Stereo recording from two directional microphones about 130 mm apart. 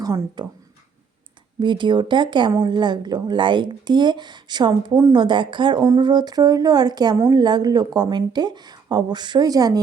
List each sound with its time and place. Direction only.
0.0 s speech: 25° right (ahead or behind)
1.5 s speech: 35° right (ahead or behind)